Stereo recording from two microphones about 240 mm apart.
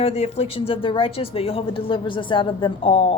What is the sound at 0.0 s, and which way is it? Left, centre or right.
Speech, left.